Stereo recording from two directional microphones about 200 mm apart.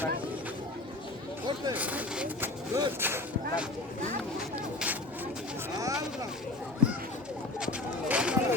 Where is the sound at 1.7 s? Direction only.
10° right (ahead or behind).